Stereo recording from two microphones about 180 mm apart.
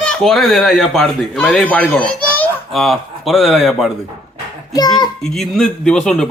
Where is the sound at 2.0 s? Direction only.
5° left (ahead or behind).